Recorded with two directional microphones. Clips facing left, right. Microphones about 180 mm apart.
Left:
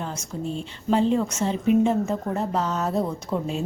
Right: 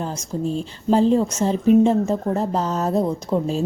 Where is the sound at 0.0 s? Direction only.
35° right (ahead or behind).